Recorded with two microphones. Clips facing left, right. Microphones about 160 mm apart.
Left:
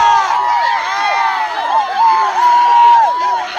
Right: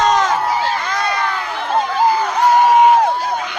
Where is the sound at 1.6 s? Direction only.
60° left (ahead or behind).